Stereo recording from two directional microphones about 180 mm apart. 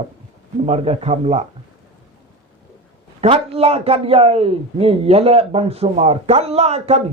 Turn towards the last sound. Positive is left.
turn(degrees=-35)  # may be behind; listen again after turning